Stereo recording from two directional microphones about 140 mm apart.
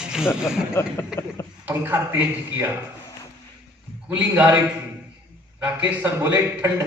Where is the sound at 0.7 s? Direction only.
15° left (ahead or behind).